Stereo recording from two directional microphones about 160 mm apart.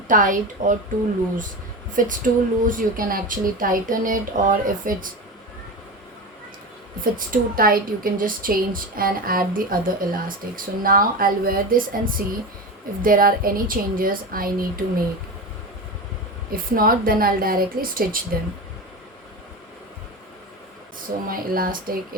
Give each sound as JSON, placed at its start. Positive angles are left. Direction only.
{"t": 0.1, "sound": "a woman's voice", "side_deg": -55}
{"t": 2.0, "sound": "a woman's voice", "side_deg": -55}
{"t": 7.0, "sound": "a woman's voice", "side_deg": -60}
{"t": 16.5, "sound": "a woman's voice", "side_deg": -65}
{"t": 21.2, "sound": "a woman's voice", "side_deg": -65}